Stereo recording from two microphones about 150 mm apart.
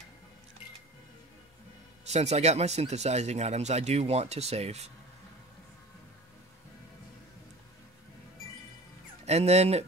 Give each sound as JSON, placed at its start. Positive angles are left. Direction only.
{"t": 2.0, "sound": "speech", "side_deg": -45}
{"t": 9.2, "sound": "speech", "side_deg": -45}